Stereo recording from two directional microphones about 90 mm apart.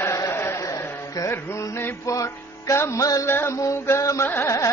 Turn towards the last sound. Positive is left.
turn(degrees=30)  # may be behind; listen again after turning